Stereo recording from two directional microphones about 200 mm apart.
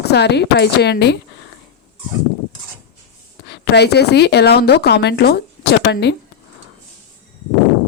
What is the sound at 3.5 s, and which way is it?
A woman's voice, 55° left (ahead or behind).